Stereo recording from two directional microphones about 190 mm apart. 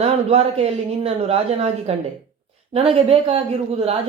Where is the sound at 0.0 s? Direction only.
30° right (ahead or behind).